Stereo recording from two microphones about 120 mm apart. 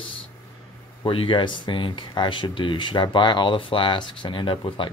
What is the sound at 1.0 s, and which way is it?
Speech, 45° left (ahead or behind).